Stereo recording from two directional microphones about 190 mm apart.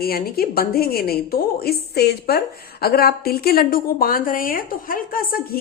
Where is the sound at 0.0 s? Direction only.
50° left (ahead or behind).